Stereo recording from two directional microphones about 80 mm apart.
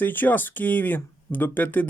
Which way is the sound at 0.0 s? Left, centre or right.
Left.